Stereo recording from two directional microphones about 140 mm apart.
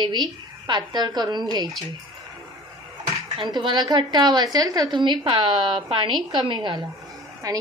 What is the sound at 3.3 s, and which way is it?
A woman's voice, 30° right (ahead or behind).